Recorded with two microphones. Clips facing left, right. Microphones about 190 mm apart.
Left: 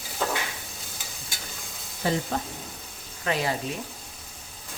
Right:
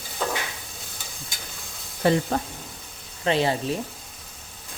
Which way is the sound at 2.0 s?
60° right (ahead or behind).